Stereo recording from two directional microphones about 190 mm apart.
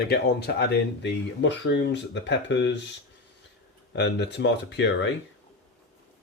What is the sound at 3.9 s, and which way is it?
Speech, 65° left (ahead or behind).